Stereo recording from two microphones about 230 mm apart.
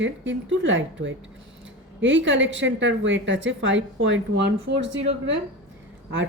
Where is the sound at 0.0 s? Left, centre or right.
Right.